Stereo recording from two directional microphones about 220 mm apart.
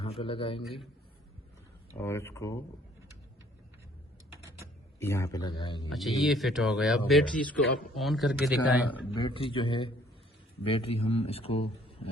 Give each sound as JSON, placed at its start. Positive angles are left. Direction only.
{"t": 0.0, "sound": "a man's voice", "side_deg": 25}
{"t": 2.0, "sound": "speech", "side_deg": 10}
{"t": 4.4, "sound": "a sound", "side_deg": -10}
{"t": 4.9, "sound": "a man's voice", "side_deg": 10}
{"t": 5.9, "sound": "speech", "side_deg": 0}
{"t": 9.2, "sound": "a man's voice", "side_deg": 25}